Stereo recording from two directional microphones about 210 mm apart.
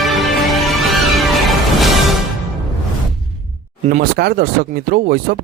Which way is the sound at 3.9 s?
45° right (ahead or behind).